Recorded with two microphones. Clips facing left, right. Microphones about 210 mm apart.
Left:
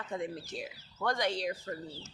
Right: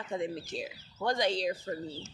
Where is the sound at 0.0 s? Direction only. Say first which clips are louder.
Right 3 dB; 25° right (ahead or behind).